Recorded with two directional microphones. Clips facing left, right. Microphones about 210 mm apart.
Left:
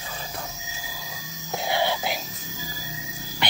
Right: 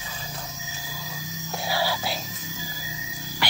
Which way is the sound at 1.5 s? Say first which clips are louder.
Left 2 dB; 20° left (ahead or behind).